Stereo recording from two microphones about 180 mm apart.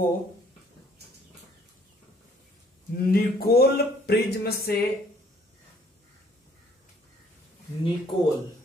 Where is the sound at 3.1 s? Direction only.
60° left (ahead or behind).